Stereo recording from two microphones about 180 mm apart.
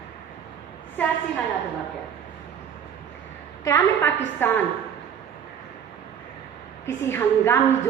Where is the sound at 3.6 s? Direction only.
15° left (ahead or behind).